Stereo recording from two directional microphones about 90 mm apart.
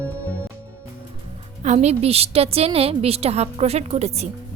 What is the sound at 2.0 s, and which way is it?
A woman's voice, 90° right.